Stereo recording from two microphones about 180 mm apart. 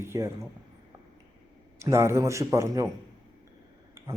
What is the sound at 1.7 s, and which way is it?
Speech, 15° right (ahead or behind).